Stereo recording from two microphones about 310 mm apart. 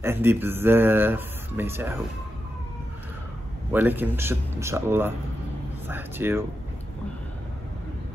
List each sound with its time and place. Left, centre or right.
0.0 s speech: centre
3.7 s speech: centre